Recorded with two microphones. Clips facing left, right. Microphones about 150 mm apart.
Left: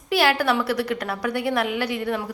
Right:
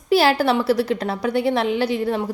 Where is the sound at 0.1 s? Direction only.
30° right (ahead or behind).